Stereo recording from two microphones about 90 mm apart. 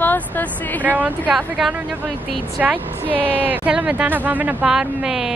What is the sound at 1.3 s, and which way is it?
Speech, 5° right (ahead or behind).